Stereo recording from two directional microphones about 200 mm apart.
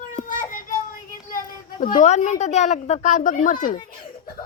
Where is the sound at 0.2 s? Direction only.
40° left (ahead or behind).